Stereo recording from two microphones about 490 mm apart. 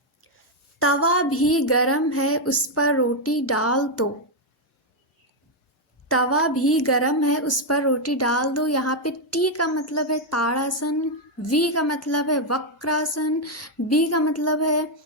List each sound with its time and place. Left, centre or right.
0.8 s a woman's voice: left
6.1 s a woman's voice: left